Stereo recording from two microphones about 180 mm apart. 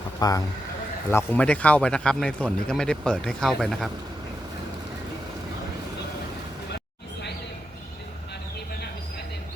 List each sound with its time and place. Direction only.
0.2 s speech: 20° left (ahead or behind)
1.1 s speech: 10° left (ahead or behind)
6.7 s a sound: 70° left (ahead or behind)